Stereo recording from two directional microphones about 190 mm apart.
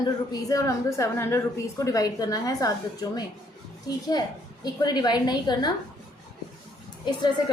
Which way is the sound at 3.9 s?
20° left (ahead or behind).